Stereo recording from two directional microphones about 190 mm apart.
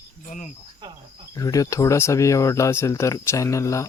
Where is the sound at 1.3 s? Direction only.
20° left (ahead or behind).